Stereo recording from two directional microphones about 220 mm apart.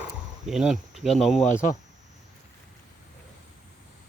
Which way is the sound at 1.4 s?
35° left (ahead or behind).